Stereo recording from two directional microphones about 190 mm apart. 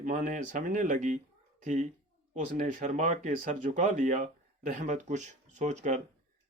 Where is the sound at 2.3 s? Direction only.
45° right (ahead or behind).